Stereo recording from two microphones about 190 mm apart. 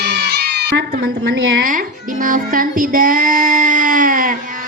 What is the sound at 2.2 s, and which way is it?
Child singing, 45° right (ahead or behind).